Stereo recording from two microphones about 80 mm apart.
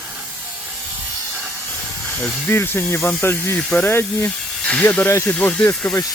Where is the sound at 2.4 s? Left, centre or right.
Left.